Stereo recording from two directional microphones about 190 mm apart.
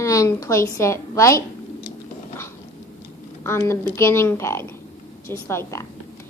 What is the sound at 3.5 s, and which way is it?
A child's voice, 15° left (ahead or behind).